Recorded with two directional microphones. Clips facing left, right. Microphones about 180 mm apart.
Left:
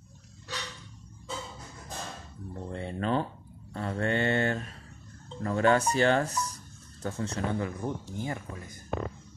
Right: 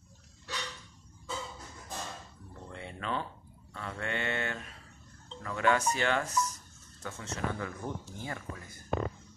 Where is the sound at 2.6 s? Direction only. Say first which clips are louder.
Left 7 dB; 35° left (ahead or behind).